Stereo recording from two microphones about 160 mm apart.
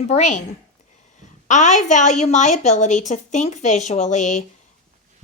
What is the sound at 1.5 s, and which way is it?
Speech, 50° left (ahead or behind).